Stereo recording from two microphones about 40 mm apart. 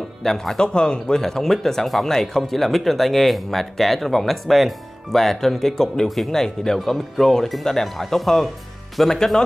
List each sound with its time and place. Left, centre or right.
0.2 s speech: centre
0.6 s speech: left